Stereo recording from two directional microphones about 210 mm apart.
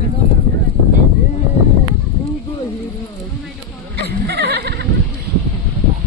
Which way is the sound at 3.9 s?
50° right (ahead or behind).